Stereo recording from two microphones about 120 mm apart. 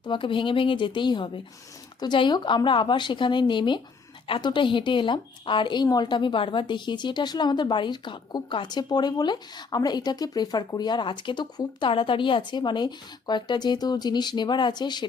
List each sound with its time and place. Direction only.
0.0 s speech: 45° left (ahead or behind)